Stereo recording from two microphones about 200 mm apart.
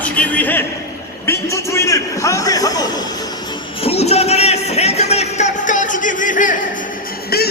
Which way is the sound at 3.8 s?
30° left (ahead or behind).